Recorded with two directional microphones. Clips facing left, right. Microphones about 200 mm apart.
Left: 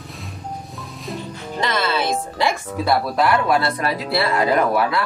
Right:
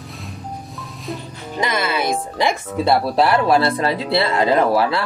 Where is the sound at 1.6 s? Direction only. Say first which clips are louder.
Right 1 dB; 10° right (ahead or behind).